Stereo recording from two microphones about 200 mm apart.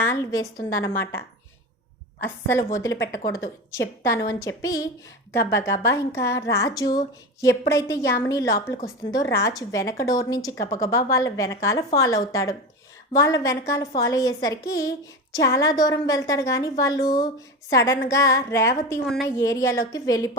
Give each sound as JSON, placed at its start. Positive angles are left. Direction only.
{"t": 0.0, "sound": "a woman's voice", "side_deg": 15}
{"t": 2.2, "sound": "a woman's voice", "side_deg": 15}
{"t": 4.3, "sound": "a woman's voice", "side_deg": 15}